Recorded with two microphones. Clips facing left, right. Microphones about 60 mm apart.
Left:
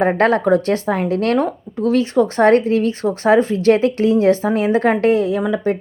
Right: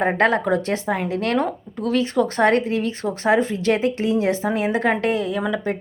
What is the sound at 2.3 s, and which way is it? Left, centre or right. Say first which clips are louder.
Speech: left 7 dB; left.